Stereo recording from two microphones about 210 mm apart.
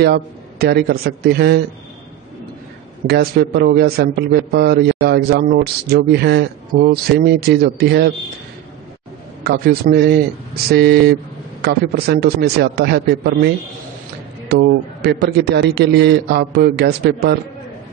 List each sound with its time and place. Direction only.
0.0 s a man's voice: 50° right (ahead or behind)
3.1 s a man's voice: 50° right (ahead or behind)
9.4 s a man's voice: 50° right (ahead or behind)
14.5 s a man's voice: 50° right (ahead or behind)